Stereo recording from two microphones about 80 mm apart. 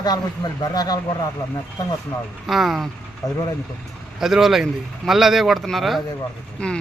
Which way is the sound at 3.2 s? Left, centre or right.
Left.